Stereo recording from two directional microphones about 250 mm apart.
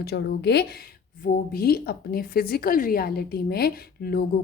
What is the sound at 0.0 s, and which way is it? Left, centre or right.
A woman's voice, left.